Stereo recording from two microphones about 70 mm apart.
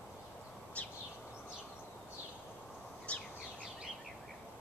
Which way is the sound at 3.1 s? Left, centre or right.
Centre.